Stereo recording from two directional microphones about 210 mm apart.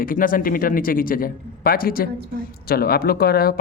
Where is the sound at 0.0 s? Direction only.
40° left (ahead or behind).